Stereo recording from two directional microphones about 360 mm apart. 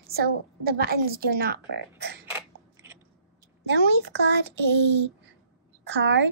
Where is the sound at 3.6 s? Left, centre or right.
Right.